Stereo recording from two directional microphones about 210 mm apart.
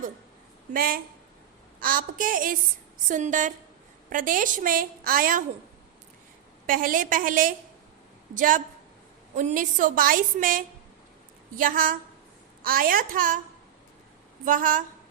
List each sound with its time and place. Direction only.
0.7 s a woman's voice: 45° right (ahead or behind)
6.7 s a woman's voice: 40° right (ahead or behind)
14.4 s a woman's voice: 40° right (ahead or behind)